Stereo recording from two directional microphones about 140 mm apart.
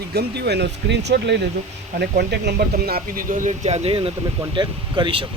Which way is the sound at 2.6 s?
90° right.